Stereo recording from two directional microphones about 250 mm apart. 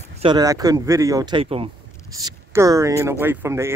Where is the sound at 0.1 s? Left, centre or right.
Right.